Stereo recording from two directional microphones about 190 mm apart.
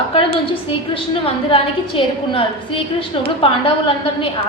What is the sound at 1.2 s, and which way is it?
A woman's voice, 30° left (ahead or behind).